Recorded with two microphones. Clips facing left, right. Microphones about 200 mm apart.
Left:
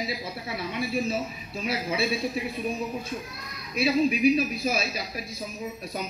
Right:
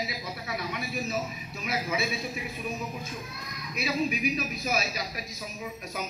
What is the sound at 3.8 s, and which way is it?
A man's voice, 30° left (ahead or behind).